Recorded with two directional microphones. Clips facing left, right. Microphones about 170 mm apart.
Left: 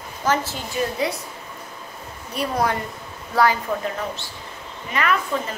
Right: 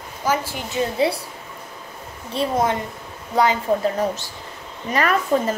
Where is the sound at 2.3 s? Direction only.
20° right (ahead or behind).